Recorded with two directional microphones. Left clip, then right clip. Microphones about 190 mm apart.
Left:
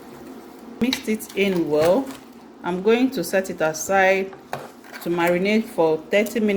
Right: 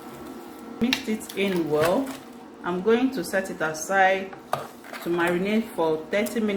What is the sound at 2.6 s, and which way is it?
Speech, 45° left (ahead or behind).